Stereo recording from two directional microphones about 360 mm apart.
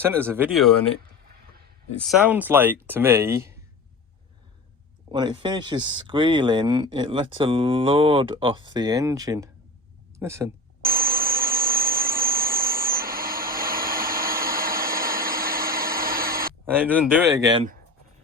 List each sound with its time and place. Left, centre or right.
0.0 s speech: centre
2.0 s speech: centre
5.1 s speech: centre
10.8 s a sound: right
16.6 s speech: centre